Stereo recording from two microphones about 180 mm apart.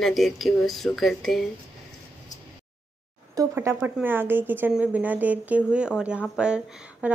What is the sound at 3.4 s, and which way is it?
Speech, 15° right (ahead or behind).